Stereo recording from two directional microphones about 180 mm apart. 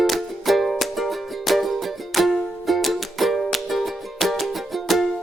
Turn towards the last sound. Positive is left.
turn(degrees=0)  # may be behind; listen again after turning